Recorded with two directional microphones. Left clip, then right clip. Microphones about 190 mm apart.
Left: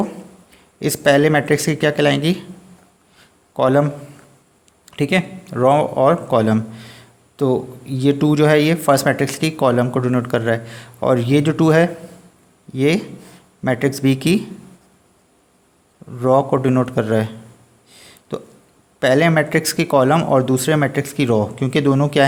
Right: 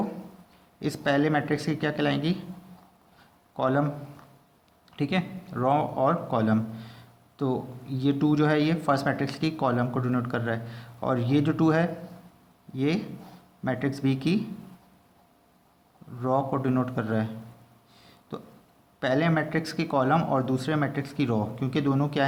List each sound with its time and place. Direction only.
0.8 s a man's voice: 45° left (ahead or behind)
3.2 s a sound: 45° left (ahead or behind)
4.9 s a man's voice: 45° left (ahead or behind)
16.1 s a man's voice: 45° left (ahead or behind)
17.9 s a sound: 45° left (ahead or behind)
18.9 s a man's voice: 45° left (ahead or behind)